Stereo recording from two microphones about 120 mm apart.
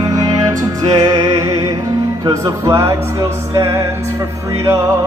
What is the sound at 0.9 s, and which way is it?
Music, 30° right (ahead or behind).